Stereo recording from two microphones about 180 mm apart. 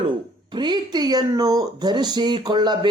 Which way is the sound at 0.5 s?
25° right (ahead or behind).